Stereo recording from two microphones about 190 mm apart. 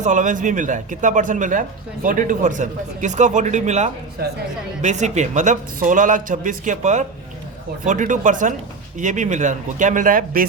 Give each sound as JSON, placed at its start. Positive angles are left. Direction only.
{"t": 0.0, "sound": "a man's voice", "side_deg": -40}